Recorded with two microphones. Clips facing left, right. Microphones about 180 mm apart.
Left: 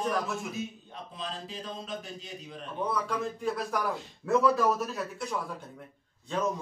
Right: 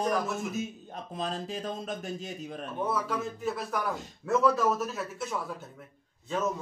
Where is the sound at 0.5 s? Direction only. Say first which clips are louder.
Right 2 dB; 45° right (ahead or behind).